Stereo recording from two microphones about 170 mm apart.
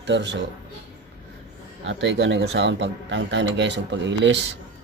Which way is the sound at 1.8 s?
90° right.